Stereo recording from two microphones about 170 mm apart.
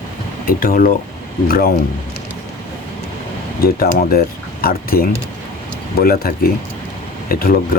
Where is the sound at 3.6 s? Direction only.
65° left (ahead or behind).